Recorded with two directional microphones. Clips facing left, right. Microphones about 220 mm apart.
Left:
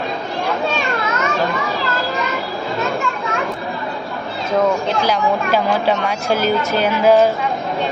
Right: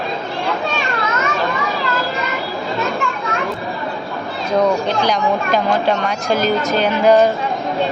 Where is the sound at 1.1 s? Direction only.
Centre (ahead or behind).